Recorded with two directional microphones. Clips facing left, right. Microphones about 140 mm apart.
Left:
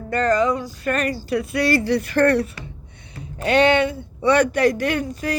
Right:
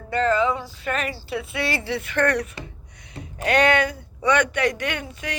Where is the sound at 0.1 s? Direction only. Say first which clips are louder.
Left 2 dB; 45° left (ahead or behind).